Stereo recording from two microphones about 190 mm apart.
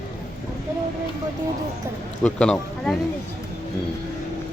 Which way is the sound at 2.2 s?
5° left (ahead or behind).